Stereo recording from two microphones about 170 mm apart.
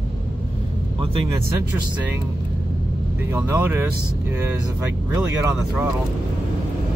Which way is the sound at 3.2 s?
15° right (ahead or behind).